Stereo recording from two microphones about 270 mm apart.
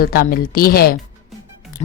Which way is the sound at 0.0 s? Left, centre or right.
Left.